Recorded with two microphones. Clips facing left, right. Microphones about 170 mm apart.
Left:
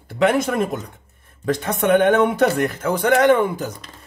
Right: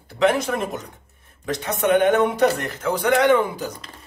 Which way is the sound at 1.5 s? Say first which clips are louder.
Left 1 dB; 55° left (ahead or behind).